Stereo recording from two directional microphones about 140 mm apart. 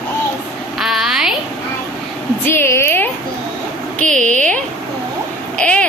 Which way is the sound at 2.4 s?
15° left (ahead or behind).